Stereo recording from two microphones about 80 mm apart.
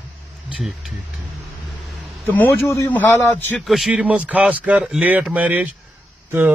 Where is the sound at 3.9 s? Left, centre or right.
Centre.